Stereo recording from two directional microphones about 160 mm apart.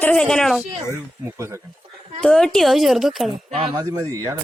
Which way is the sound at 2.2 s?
5° left (ahead or behind).